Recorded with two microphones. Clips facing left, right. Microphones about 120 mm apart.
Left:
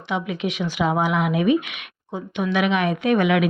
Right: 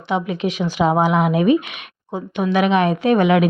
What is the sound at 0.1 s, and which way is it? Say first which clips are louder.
Speech: right 4 dB; 35° right (ahead or behind).